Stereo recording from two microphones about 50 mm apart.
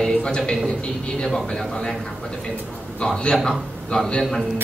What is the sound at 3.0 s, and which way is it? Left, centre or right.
A man's voice, centre.